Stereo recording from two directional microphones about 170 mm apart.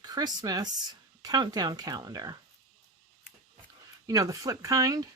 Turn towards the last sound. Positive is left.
turn(degrees=-20)  # may be behind; listen again after turning